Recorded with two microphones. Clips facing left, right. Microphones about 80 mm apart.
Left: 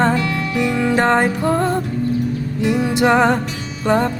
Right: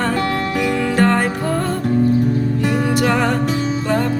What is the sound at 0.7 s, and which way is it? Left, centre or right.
Music, left.